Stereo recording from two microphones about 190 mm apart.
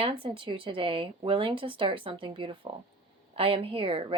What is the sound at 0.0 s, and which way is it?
A woman's voice, 25° right (ahead or behind).